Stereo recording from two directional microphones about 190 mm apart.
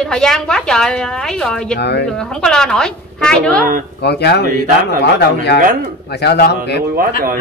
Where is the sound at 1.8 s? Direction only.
60° left (ahead or behind).